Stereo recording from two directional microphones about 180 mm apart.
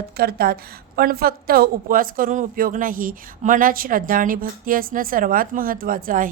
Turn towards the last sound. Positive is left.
turn(degrees=-50)  # may be behind; listen again after turning